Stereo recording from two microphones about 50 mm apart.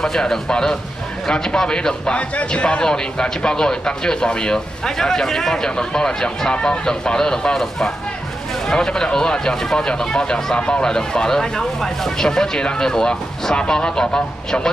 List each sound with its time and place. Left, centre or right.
0.0 s a man's voice: centre